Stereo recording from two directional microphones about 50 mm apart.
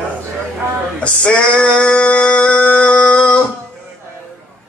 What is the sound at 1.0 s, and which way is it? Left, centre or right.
Male singing, left.